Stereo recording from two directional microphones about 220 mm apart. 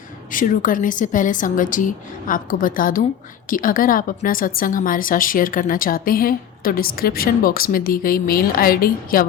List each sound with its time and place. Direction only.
0.3 s a woman's voice: 35° left (ahead or behind)